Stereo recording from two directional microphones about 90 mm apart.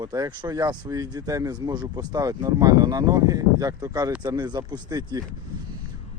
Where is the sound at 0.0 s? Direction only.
45° right (ahead or behind).